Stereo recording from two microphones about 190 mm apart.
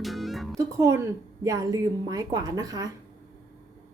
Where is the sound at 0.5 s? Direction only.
15° right (ahead or behind).